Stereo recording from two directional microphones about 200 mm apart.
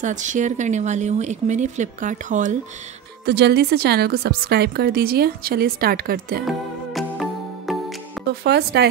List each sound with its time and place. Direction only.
0.0 s speech: 40° right (ahead or behind)
3.3 s a woman's voice: 55° right (ahead or behind)
6.4 s music: centre (ahead or behind)
8.5 s speech: 55° right (ahead or behind)